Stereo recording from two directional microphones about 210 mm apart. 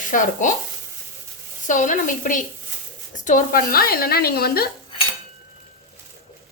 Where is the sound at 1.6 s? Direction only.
40° left (ahead or behind).